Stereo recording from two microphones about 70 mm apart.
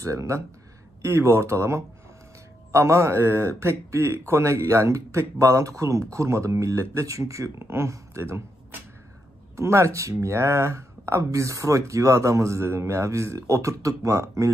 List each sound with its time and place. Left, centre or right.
0.0 s a man's voice: right
9.6 s speech: right